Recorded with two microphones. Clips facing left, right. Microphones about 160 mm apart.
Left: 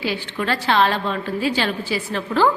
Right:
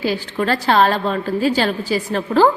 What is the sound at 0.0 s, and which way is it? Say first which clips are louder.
A woman's voice: right 4 dB; 40° right (ahead or behind).